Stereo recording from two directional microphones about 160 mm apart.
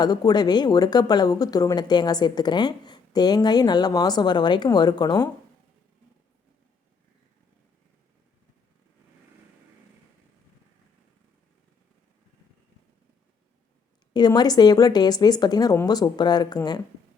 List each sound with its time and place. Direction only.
0.0 s speech: 25° left (ahead or behind)
14.1 s speech: 25° left (ahead or behind)